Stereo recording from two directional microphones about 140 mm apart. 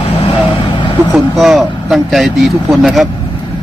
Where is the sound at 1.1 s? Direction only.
Centre (ahead or behind).